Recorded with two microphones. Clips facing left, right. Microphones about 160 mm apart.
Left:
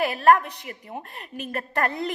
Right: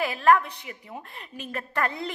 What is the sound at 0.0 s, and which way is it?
Speech, 55° left (ahead or behind).